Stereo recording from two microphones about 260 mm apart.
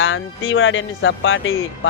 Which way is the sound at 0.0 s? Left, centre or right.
Left.